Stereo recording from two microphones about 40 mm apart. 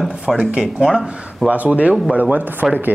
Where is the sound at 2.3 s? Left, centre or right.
Right.